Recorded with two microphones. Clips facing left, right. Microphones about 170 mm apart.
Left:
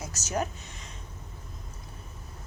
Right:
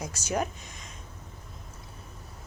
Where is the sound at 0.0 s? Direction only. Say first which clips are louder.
Right 1 dB; 10° right (ahead or behind).